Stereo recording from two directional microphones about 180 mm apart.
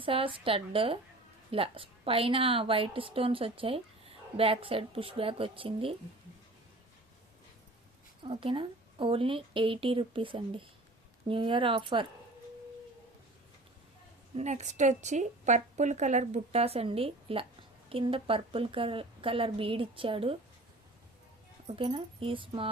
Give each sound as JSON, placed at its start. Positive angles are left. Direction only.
{"t": 0.0, "sound": "a woman's voice", "side_deg": -30}
{"t": 8.2, "sound": "a woman's voice", "side_deg": -30}
{"t": 14.3, "sound": "a woman's voice", "side_deg": -40}
{"t": 21.8, "sound": "a woman's voice", "side_deg": -30}